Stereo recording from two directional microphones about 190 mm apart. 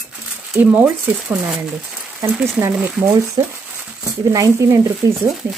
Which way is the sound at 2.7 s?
5° right (ahead or behind).